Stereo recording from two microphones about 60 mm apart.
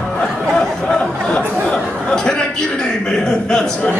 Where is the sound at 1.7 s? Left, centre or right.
Centre.